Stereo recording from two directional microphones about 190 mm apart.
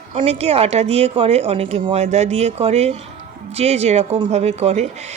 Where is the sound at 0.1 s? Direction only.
35° right (ahead or behind).